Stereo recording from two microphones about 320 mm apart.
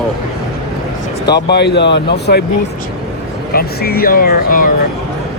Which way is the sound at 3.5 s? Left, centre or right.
Left.